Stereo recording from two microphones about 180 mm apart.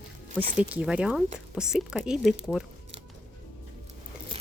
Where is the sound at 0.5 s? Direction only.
5° right (ahead or behind).